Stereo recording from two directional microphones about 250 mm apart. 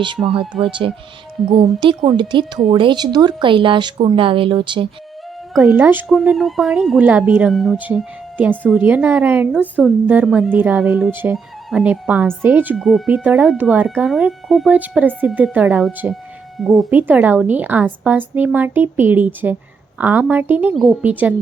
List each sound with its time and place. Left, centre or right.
0.3 s speech: centre
5.6 s a woman's voice: centre